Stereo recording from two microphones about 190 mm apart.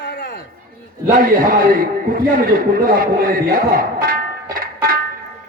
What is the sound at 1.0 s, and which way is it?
A man's voice, 45° right (ahead or behind).